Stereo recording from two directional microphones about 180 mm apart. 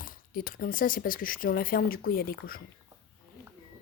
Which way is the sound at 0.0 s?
50° left (ahead or behind).